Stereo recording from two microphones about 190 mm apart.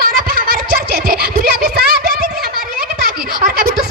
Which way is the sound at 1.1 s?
50° right (ahead or behind).